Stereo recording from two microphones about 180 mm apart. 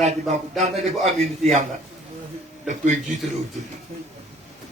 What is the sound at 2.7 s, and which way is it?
Speech, 45° right (ahead or behind).